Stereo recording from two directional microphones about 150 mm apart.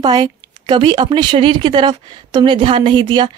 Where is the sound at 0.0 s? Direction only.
30° right (ahead or behind).